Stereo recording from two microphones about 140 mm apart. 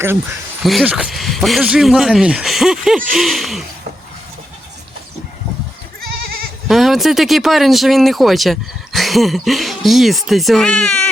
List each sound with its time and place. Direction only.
0.6 s speech: centre (ahead or behind)
6.7 s speech: centre (ahead or behind)